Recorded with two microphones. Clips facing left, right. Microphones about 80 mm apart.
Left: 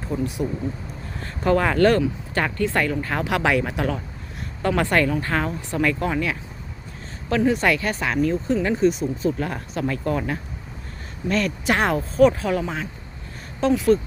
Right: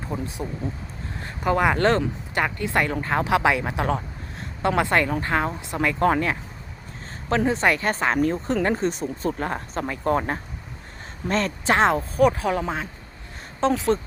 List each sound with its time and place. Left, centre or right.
0.1 s speech: right
1.2 s speech: centre
6.0 s speech: right